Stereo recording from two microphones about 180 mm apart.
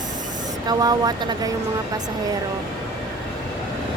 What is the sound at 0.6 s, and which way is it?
Speech, 20° right (ahead or behind).